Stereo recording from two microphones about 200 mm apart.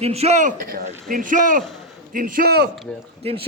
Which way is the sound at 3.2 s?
30° right (ahead or behind).